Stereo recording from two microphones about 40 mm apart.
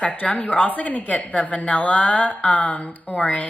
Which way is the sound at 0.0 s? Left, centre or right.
Left.